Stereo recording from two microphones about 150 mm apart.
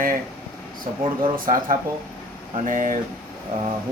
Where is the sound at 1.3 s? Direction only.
70° right (ahead or behind).